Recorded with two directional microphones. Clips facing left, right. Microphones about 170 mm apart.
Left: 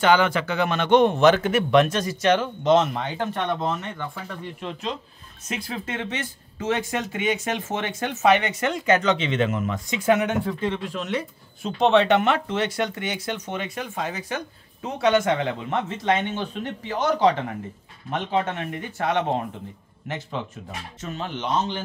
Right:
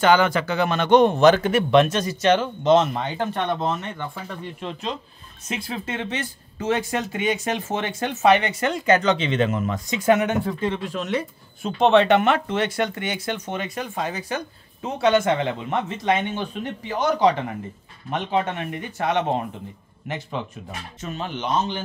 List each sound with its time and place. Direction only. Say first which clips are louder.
0.0 s speech: right 1 dB; 40° right (ahead or behind); by 15.5 s 25° right (ahead or behind)
15.7 s speech: even; 15° right (ahead or behind)